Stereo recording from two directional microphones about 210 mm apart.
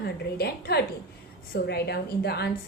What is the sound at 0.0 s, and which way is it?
A woman's voice, 50° left (ahead or behind).